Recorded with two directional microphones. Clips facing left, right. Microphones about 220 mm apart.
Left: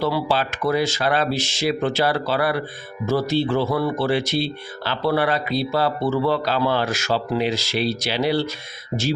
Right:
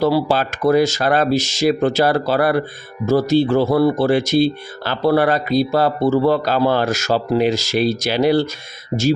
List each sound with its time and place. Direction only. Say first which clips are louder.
0.0 s speech: right 5 dB; 45° right (ahead or behind)